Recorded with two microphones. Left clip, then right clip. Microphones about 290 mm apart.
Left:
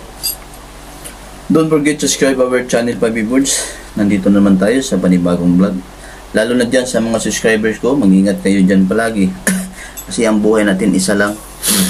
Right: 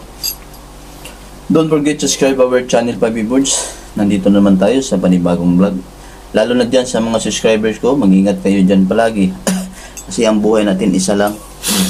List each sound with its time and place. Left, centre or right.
1.5 s speech: centre